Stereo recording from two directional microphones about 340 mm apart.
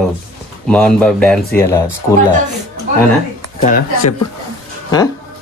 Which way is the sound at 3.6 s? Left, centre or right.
Left.